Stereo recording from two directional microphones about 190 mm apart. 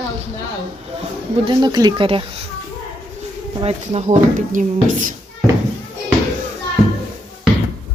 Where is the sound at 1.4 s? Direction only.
20° right (ahead or behind).